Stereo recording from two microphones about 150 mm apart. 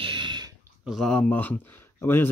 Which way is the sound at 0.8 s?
Centre (ahead or behind).